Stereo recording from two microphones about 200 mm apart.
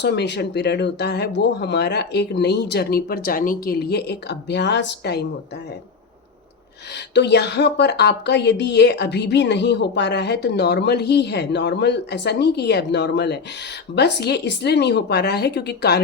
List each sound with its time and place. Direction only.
0.0 s a woman's voice: 55° left (ahead or behind)
7.1 s a woman's voice: 60° left (ahead or behind)